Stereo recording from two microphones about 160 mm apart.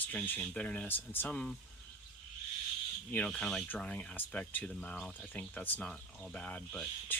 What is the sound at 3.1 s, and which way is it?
Speech, 5° left (ahead or behind).